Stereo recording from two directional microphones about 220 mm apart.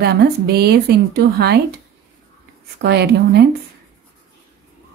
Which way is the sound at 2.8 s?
50° right (ahead or behind).